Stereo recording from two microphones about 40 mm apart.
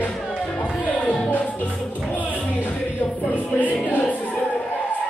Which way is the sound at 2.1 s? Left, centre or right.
Left.